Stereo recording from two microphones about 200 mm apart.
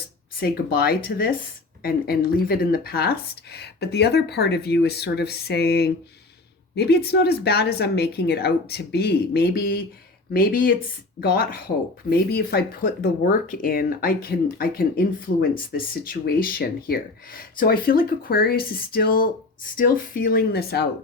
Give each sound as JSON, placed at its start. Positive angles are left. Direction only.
{"t": 0.3, "sound": "speech", "side_deg": 50}